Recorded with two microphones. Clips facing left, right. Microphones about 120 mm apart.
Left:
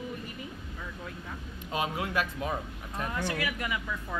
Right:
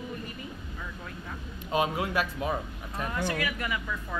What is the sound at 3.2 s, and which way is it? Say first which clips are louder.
Speech: right 1 dB; 20° left (ahead or behind).